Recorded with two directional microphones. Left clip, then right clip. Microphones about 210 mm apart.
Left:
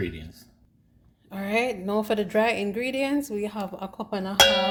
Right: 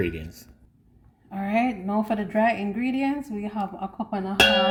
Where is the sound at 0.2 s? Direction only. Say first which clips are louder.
Right 4 dB; 20° right (ahead or behind).